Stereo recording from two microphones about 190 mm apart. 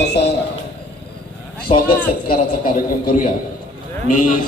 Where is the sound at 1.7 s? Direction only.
30° left (ahead or behind).